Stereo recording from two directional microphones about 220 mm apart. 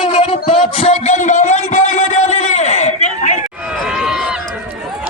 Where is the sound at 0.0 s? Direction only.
30° left (ahead or behind).